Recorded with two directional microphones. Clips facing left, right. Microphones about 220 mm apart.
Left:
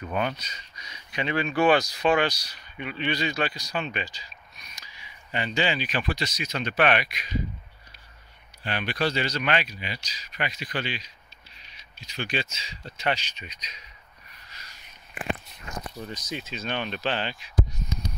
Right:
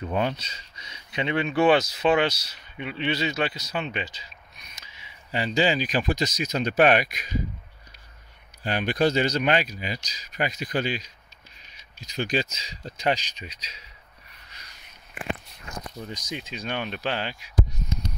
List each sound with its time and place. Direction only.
0.0 s speech: 25° right (ahead or behind); by 7.2 s 45° right (ahead or behind)
8.6 s speech: 45° right (ahead or behind)
16.1 s speech: 15° right (ahead or behind)